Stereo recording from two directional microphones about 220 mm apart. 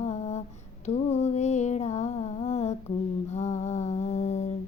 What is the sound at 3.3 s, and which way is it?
Mantra, 30° left (ahead or behind).